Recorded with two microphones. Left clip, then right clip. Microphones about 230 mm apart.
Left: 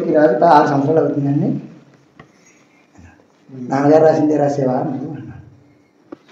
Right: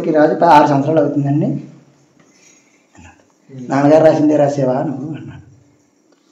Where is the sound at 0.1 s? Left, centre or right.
Right.